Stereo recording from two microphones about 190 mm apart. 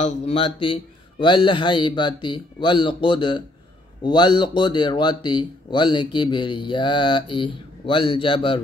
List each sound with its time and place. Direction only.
0.0 s speech: 35° left (ahead or behind)